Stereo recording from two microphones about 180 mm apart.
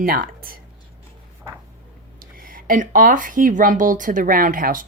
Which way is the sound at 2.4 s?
50° right (ahead or behind).